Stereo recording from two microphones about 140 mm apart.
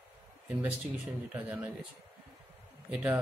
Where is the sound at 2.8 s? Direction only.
5° right (ahead or behind).